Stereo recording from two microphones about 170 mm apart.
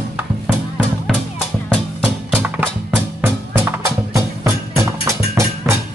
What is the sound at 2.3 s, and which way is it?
Music, 10° right (ahead or behind).